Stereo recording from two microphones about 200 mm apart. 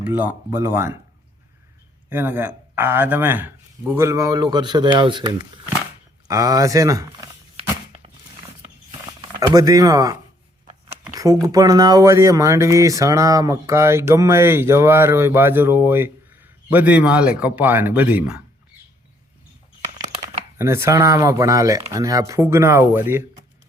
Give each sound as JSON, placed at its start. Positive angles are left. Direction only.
{"t": 0.0, "sound": "speech", "side_deg": -10}
{"t": 2.0, "sound": "speech", "side_deg": -10}
{"t": 9.5, "sound": "speech", "side_deg": -15}
{"t": 11.0, "sound": "a sound", "side_deg": -15}
{"t": 11.4, "sound": "speech", "side_deg": -20}
{"t": 20.6, "sound": "speech", "side_deg": -15}